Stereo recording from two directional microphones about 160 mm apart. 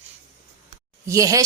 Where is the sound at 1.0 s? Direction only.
20° right (ahead or behind).